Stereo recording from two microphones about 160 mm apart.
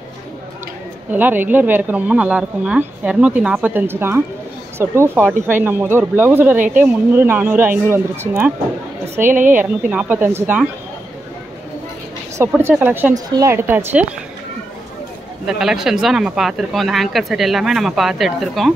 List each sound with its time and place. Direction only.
1.1 s speech: 10° right (ahead or behind)
12.4 s speech: 15° right (ahead or behind)
15.4 s speech: 5° right (ahead or behind)